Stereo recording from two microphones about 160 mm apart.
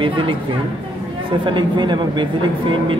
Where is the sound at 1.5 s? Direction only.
30° right (ahead or behind).